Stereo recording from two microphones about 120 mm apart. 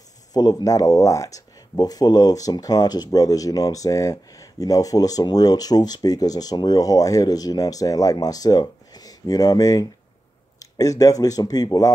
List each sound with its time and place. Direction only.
0.3 s speech: 35° left (ahead or behind)